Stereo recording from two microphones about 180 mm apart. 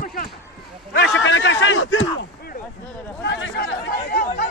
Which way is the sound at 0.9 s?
85° left.